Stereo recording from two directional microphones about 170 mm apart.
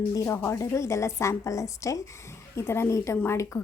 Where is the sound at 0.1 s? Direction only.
15° left (ahead or behind).